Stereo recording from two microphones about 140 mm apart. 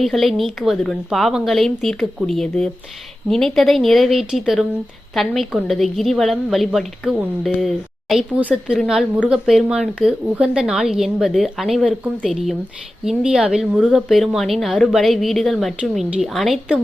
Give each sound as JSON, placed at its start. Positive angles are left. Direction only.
{"t": 0.0, "sound": "a woman's voice", "side_deg": 0}